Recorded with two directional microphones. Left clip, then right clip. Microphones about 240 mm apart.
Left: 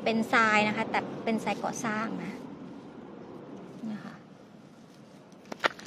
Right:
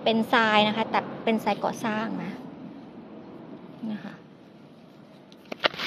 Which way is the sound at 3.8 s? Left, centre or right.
Centre.